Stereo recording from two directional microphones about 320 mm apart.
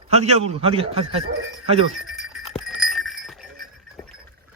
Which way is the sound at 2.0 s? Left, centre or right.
Centre.